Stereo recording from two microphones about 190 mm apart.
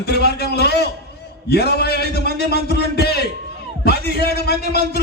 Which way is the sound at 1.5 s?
60° left (ahead or behind).